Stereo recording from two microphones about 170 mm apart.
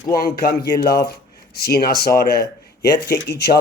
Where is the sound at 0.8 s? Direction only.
75° left (ahead or behind).